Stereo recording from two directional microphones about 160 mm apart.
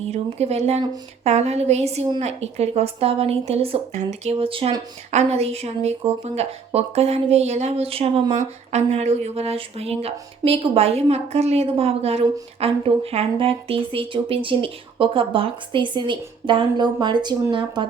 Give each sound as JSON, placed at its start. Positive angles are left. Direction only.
{"t": 0.1, "sound": "a woman's voice", "side_deg": -40}